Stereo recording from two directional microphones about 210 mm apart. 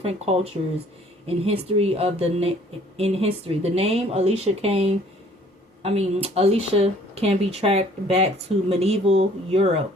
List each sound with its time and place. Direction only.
0.0 s speech: 30° right (ahead or behind)